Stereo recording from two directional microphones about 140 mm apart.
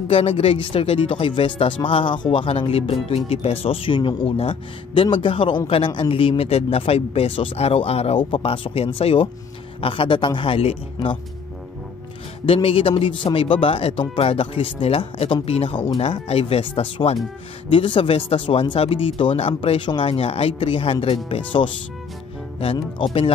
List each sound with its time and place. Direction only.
0.1 s speech: 45° left (ahead or behind)
12.4 s speech: 40° left (ahead or behind)